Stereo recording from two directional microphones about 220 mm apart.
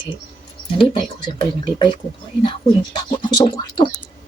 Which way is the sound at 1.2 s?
20° left (ahead or behind).